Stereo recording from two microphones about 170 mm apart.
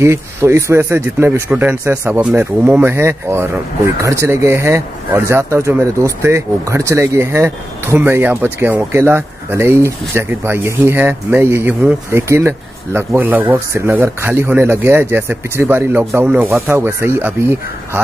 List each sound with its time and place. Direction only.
0.0 s speech: 15° right (ahead or behind)